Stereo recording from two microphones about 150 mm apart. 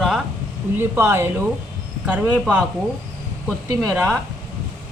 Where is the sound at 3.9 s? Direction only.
10° right (ahead or behind).